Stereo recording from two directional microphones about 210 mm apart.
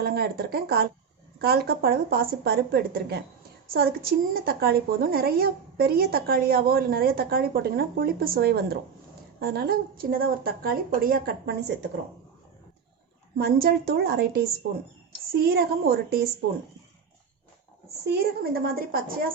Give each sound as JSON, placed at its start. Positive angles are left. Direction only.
{"t": 0.0, "sound": "a woman's voice", "side_deg": -45}
{"t": 13.3, "sound": "a woman's voice", "side_deg": -45}
{"t": 18.0, "sound": "a woman's voice", "side_deg": -50}